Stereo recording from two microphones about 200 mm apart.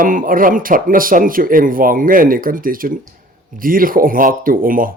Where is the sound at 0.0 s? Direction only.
45° right (ahead or behind).